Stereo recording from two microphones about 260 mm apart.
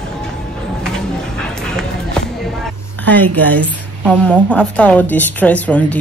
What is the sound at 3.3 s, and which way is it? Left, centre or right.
A woman's voice, centre.